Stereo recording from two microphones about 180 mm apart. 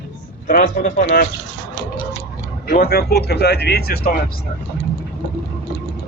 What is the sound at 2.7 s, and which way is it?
Speech, 60° left (ahead or behind).